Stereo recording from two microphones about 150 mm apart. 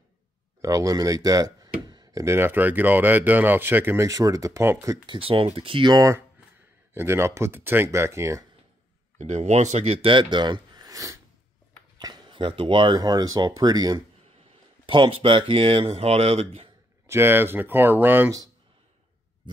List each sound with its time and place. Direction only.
0.6 s speech: 20° right (ahead or behind)
5.0 s speech: 35° right (ahead or behind)
9.2 s speech: 50° right (ahead or behind)
17.0 s speech: 15° right (ahead or behind)